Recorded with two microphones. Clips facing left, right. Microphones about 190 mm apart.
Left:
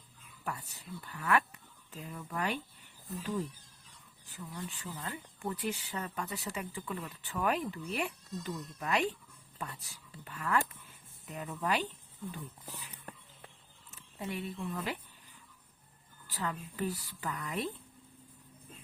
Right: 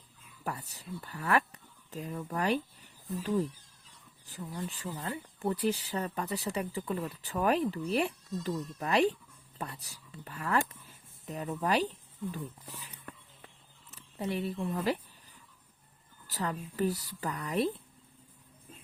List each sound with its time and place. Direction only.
0.4 s speech: 35° right (ahead or behind)
4.3 s speech: 35° right (ahead or behind)
13.9 s a woman's voice: 35° right (ahead or behind)
16.2 s speech: 40° right (ahead or behind)